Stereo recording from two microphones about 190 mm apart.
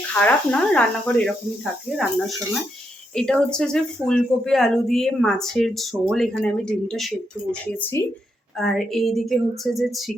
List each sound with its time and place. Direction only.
0.1 s speech: 10° left (ahead or behind)
3.2 s speech: 5° left (ahead or behind)
8.5 s speech: centre (ahead or behind)